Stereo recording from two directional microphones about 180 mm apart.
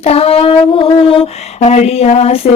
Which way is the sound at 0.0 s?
35° left (ahead or behind).